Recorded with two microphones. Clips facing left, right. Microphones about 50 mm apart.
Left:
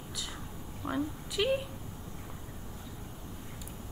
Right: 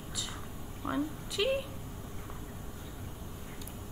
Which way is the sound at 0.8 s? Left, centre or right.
Centre.